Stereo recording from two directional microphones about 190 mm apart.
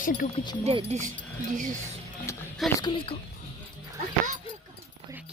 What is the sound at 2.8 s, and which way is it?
Speech, 25° left (ahead or behind).